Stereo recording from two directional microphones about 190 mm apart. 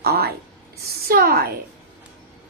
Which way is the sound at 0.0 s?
55° right (ahead or behind).